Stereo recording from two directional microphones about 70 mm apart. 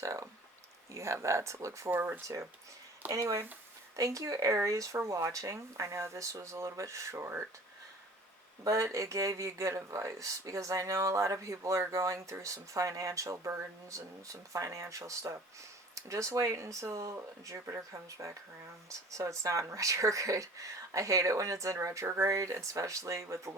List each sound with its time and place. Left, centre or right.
0.0 s speech: right
1.9 s speech: right
2.2 s speech: right
8.6 s speech: right